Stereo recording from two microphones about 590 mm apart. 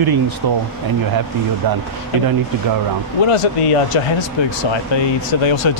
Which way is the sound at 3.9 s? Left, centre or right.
Left.